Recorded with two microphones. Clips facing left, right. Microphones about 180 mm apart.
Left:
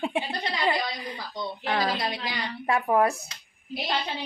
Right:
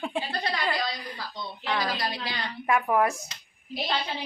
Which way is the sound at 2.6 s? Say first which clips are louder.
Left 1 dB; 30° left (ahead or behind).